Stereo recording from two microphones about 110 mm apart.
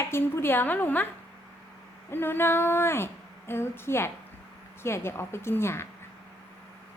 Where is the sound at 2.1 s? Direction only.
20° left (ahead or behind).